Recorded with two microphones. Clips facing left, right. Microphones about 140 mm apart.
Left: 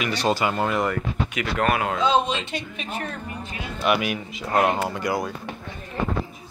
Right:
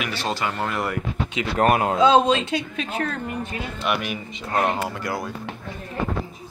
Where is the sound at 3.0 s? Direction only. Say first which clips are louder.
Right 6 dB; 75° right (ahead or behind).